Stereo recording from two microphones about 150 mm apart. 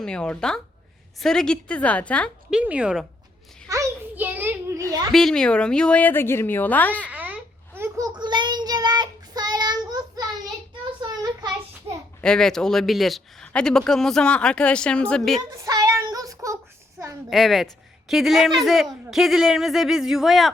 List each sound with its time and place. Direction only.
0.0 s a woman's voice: 5° left (ahead or behind)
2.5 s speech: 5° right (ahead or behind)
3.7 s a sound: 20° right (ahead or behind)
4.2 s child singing: 10° right (ahead or behind)
5.1 s a woman's voice: 5° left (ahead or behind)
7.0 s a sound: 10° right (ahead or behind); by 11.4 s 25° right (ahead or behind)
12.2 s speech: 5° left (ahead or behind)
15.5 s child singing: 20° right (ahead or behind)
17.2 s speech: centre (ahead or behind)